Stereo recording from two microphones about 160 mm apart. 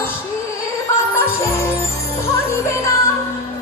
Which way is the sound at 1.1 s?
15° left (ahead or behind).